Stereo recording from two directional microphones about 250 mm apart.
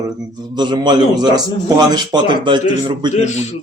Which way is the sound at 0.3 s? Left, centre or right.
Centre.